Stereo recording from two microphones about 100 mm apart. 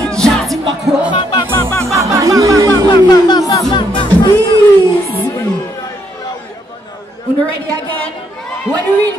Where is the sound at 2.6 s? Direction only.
40° left (ahead or behind).